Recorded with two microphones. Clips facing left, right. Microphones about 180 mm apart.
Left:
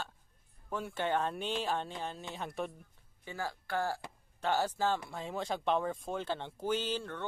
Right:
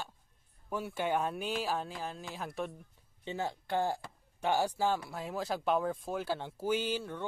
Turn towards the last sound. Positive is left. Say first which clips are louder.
# right 2 dB
turn(degrees=-10)  # may be behind; listen again after turning